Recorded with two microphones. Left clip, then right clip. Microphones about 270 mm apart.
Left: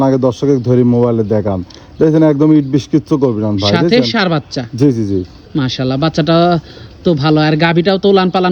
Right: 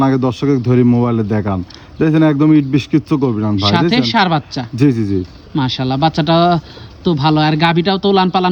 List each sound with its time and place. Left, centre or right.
0.0 s a man's voice: right
3.7 s speech: centre